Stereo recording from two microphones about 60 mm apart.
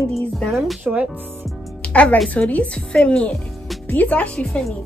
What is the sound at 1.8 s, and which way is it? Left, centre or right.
Music, centre.